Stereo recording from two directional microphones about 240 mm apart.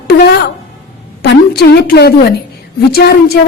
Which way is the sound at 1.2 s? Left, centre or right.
Left.